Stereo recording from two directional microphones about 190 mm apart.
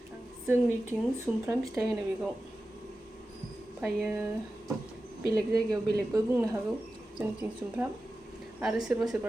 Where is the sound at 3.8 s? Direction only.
5° right (ahead or behind).